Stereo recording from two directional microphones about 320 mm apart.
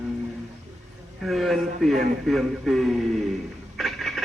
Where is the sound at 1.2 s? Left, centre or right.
Centre.